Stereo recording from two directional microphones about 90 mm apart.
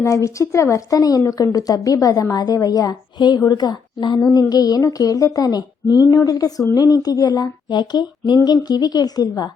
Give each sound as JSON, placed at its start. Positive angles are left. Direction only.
{"t": 0.0, "sound": "a woman's voice", "side_deg": 35}